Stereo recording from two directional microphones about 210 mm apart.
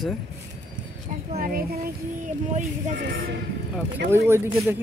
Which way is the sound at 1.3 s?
40° right (ahead or behind).